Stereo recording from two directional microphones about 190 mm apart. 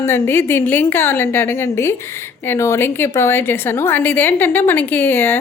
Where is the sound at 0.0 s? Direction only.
10° left (ahead or behind).